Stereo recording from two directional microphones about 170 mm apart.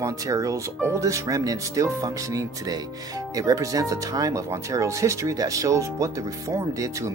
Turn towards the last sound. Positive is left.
turn(degrees=-20)  # may be behind; listen again after turning